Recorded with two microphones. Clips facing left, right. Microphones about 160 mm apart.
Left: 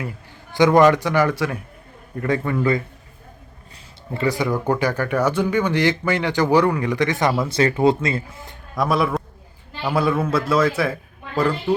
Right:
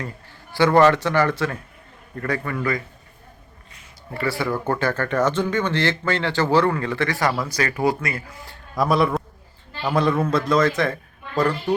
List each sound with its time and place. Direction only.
0.5 s a man's voice: 15° left (ahead or behind)
4.1 s speech: 20° left (ahead or behind)
8.7 s a man's voice: centre (ahead or behind)